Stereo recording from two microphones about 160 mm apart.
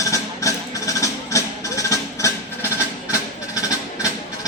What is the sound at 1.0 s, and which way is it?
Music, 20° left (ahead or behind).